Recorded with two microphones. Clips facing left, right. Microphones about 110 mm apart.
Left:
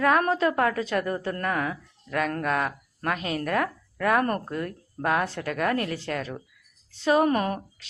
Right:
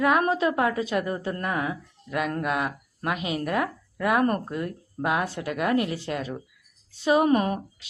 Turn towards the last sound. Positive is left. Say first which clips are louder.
# right 2 dB
turn(degrees=-20)  # may be behind; listen again after turning